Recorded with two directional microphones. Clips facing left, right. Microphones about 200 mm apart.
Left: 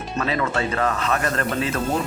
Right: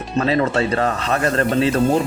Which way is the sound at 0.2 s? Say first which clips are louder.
Right 6 dB; 35° right (ahead or behind).